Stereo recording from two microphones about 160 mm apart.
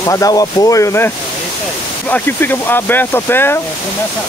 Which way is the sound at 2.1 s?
10° left (ahead or behind).